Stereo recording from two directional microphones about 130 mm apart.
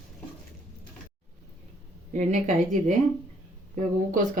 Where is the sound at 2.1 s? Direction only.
70° right (ahead or behind).